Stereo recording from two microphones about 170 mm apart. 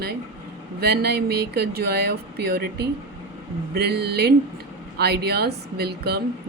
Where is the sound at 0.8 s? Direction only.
70° right (ahead or behind).